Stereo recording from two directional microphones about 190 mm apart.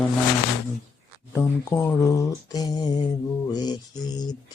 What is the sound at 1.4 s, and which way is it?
Speech, 15° left (ahead or behind).